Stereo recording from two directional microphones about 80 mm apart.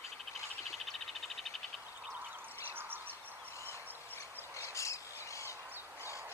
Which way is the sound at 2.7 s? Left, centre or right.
Right.